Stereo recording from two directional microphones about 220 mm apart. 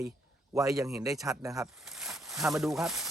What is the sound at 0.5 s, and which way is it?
Speech, 15° right (ahead or behind).